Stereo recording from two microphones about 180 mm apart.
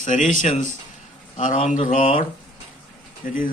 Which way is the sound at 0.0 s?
45° left (ahead or behind).